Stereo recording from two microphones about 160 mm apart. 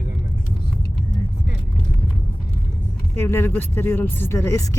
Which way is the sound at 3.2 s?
15° left (ahead or behind).